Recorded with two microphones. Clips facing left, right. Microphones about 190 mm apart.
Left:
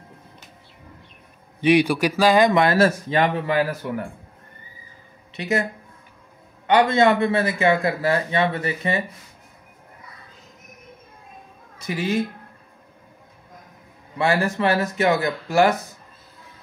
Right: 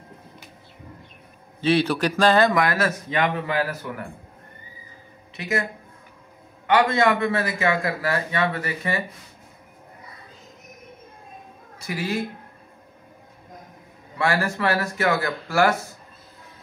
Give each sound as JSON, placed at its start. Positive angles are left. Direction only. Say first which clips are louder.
{"t": 1.6, "sound": "a man's voice", "louder": "left 3 dB", "side_deg": 15}
{"t": 2.5, "sound": "a man's voice", "louder": "left 5 dB", "side_deg": 30}
{"t": 5.3, "sound": "speech", "louder": "left 3 dB", "side_deg": 25}
{"t": 6.7, "sound": "a man's voice", "louder": "left 3 dB", "side_deg": 25}
{"t": 11.8, "sound": "a woman's voice", "louder": "left 3 dB", "side_deg": 20}
{"t": 14.1, "sound": "a man's voice", "louder": "left 3 dB", "side_deg": 20}